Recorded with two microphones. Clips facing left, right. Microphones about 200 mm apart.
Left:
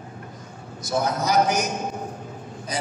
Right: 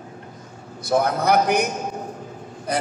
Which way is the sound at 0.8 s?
60° right (ahead or behind).